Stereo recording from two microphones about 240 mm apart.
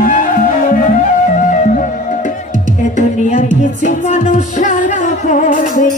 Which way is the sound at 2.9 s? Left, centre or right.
Left.